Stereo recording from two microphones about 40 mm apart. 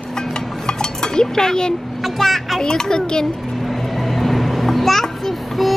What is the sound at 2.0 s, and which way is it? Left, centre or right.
Speech, centre.